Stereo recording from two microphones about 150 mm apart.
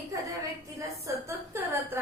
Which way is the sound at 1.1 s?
20° right (ahead or behind).